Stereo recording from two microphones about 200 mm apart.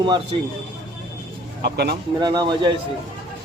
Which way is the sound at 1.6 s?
55° right (ahead or behind).